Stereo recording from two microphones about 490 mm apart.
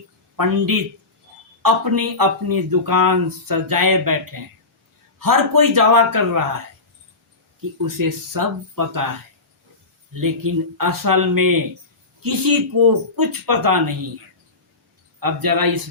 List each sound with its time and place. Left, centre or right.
0.3 s speech: right
7.9 s speech: right
10.1 s speech: right
15.2 s speech: right